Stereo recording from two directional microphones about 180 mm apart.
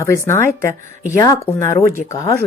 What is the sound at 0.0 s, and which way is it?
Speech, 15° left (ahead or behind).